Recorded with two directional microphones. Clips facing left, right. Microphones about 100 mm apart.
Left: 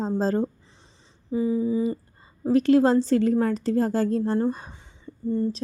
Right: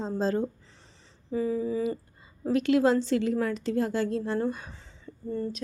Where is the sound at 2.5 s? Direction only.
35° left (ahead or behind).